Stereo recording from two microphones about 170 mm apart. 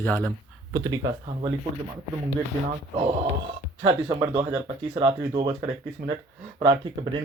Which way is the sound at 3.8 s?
30° right (ahead or behind).